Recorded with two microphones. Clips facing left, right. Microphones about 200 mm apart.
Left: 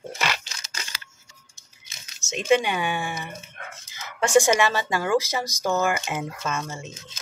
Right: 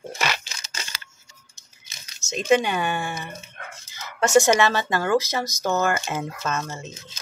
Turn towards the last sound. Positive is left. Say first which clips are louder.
# right 1 dB
turn(degrees=15)  # may be behind; listen again after turning